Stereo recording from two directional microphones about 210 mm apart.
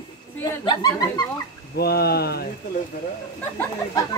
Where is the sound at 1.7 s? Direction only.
50° left (ahead or behind).